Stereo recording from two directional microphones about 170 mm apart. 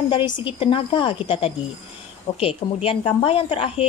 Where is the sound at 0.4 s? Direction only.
30° left (ahead or behind).